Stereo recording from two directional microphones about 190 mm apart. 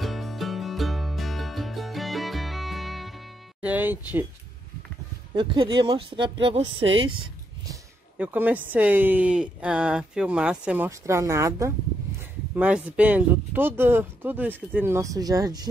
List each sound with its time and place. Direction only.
0.0 s music: centre (ahead or behind)
5.3 s speech: 25° right (ahead or behind)
7.6 s speech: 15° right (ahead or behind)